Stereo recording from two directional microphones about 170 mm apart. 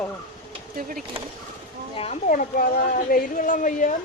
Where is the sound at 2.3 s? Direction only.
50° left (ahead or behind).